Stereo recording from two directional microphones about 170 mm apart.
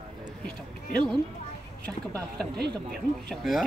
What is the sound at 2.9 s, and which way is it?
Speech, centre (ahead or behind).